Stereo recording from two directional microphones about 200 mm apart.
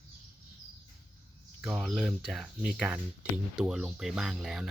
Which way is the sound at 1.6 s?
Centre (ahead or behind).